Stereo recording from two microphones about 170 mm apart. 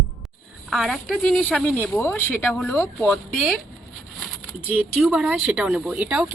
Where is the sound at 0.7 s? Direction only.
Centre (ahead or behind).